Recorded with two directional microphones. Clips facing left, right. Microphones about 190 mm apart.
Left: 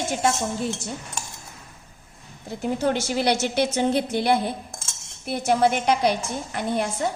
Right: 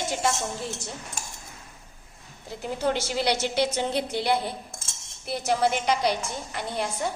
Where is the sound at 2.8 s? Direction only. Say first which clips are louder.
Left 1 dB; 50° left (ahead or behind).